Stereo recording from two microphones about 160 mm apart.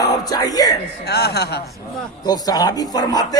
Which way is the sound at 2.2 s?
25° left (ahead or behind).